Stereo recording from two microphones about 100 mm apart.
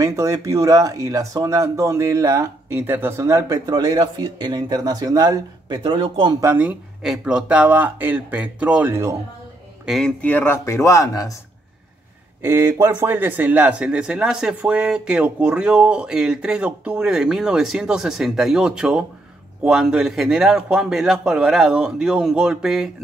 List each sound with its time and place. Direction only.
0.0 s speech: 35° right (ahead or behind)
3.6 s speech: 45° right (ahead or behind)
5.8 s a man's voice: 60° right (ahead or behind)
6.4 s speech: 20° right (ahead or behind)
7.0 s speech: 5° right (ahead or behind)
9.8 s a man's voice: 5° left (ahead or behind)
10.2 s speech: 20° left (ahead or behind)
12.4 s a man's voice: 25° right (ahead or behind); by 22.8 s 5° right (ahead or behind)